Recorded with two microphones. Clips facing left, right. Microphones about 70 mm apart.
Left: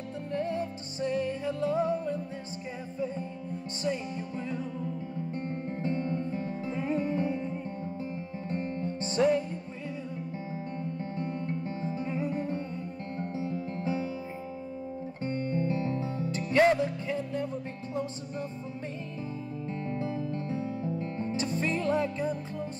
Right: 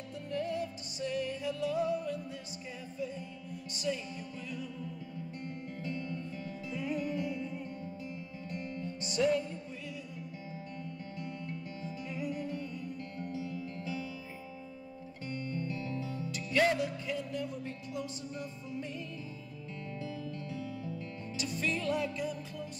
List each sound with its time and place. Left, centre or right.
0.3 s music: left
3.8 s speech: left
5.3 s music: left
10.5 s music: left
15.2 s music: left
19.7 s music: left